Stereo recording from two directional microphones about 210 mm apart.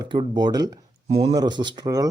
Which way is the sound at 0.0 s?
20° right (ahead or behind).